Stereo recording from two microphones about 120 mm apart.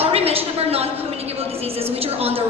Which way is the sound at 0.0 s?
55° right (ahead or behind).